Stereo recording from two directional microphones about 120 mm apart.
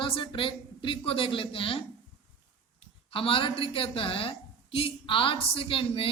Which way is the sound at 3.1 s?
50° left (ahead or behind).